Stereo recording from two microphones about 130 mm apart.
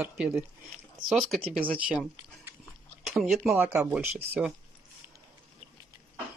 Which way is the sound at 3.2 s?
Centre (ahead or behind).